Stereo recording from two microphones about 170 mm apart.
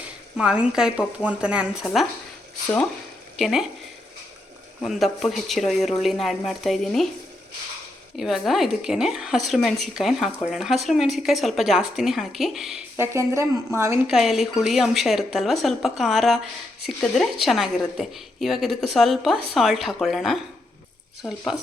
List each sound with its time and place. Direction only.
0.3 s speech: 5° right (ahead or behind)
3.3 s speech: centre (ahead or behind)
4.8 s speech: centre (ahead or behind)
8.2 s speech: centre (ahead or behind)
13.0 s a woman's voice: 15° right (ahead or behind)
14.1 s speech: centre (ahead or behind)